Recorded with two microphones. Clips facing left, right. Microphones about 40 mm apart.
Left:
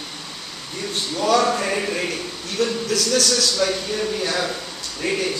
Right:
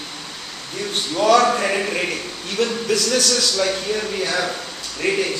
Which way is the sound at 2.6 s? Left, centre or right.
Right.